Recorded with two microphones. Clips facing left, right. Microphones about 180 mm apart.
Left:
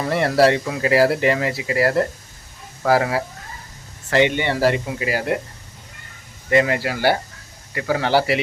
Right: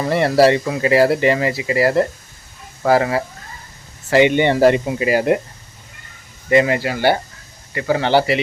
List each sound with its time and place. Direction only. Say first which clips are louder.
0.0 s speech: right 3 dB; centre (ahead or behind)
4.1 s speech: right 5 dB; 15° right (ahead or behind)
6.5 s speech: right 3 dB; 5° right (ahead or behind)